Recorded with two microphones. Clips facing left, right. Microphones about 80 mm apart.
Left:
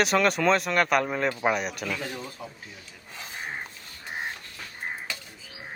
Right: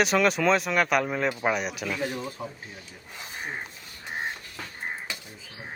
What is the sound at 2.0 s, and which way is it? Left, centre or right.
Speech, centre.